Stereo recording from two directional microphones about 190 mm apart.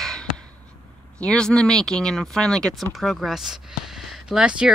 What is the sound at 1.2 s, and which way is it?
Speech, 5° left (ahead or behind).